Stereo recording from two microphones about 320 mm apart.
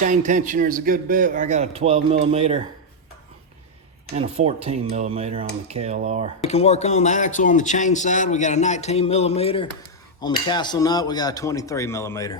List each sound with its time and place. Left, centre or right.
0.0 s a man's voice: right
4.1 s a man's voice: centre
6.4 s speech: centre